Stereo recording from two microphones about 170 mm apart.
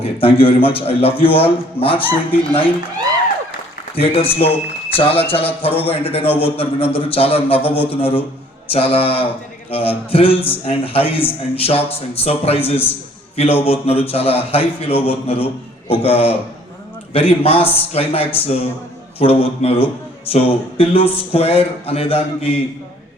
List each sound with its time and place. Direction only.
0.0 s a man's voice: 35° left (ahead or behind)
3.9 s a man's voice: 35° left (ahead or behind)